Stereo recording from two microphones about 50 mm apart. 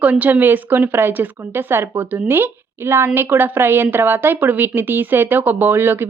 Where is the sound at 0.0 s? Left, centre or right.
Right.